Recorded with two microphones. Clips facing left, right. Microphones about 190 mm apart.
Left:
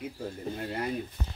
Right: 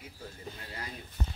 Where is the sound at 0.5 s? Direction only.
55° left (ahead or behind).